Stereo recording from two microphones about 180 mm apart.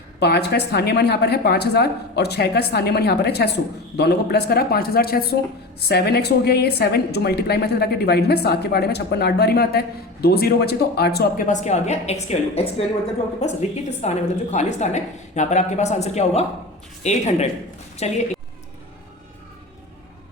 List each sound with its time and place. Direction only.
0.2 s a woman's voice: 65° left (ahead or behind)
11.4 s a woman's voice: 40° left (ahead or behind)